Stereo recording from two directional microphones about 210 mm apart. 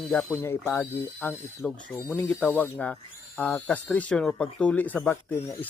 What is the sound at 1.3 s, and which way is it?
Speech, centre (ahead or behind).